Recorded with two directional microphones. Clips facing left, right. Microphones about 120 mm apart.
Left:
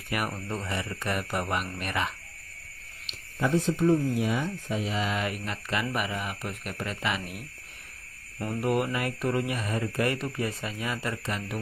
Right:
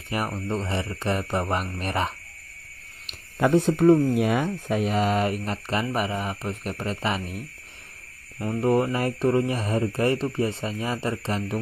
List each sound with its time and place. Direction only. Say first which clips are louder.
0.3 s speech: right 5 dB; 25° right (ahead or behind)
3.1 s speech: right 6 dB; 60° right (ahead or behind); by 7.4 s 30° right (ahead or behind)
8.5 s speech: right 5 dB; 30° right (ahead or behind)